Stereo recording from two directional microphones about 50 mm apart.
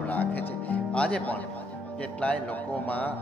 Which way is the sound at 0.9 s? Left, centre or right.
Left.